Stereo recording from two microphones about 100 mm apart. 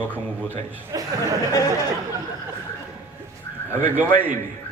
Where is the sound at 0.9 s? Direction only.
35° right (ahead or behind).